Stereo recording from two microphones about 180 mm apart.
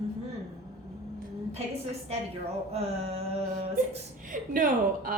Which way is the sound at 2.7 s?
35° right (ahead or behind).